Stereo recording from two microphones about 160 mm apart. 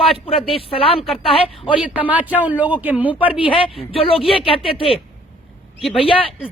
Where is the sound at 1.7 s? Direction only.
10° right (ahead or behind).